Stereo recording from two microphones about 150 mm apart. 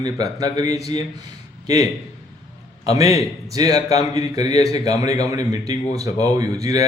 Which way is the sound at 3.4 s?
25° right (ahead or behind).